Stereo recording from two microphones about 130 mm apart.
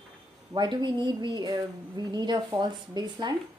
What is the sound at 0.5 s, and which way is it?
Speech, 35° right (ahead or behind).